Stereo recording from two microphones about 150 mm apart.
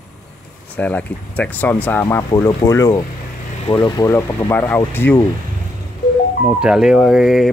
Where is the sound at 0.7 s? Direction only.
10° left (ahead or behind).